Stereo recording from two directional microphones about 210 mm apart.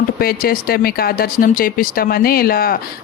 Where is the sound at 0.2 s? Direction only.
45° left (ahead or behind).